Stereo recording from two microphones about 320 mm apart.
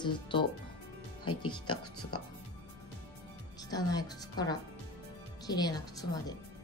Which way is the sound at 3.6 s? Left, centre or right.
Centre.